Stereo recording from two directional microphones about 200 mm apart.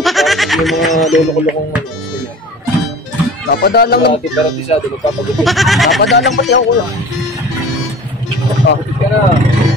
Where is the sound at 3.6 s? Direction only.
55° left (ahead or behind).